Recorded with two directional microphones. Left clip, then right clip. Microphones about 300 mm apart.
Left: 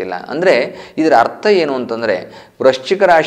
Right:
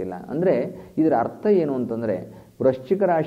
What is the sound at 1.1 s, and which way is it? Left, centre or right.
A man's voice, centre.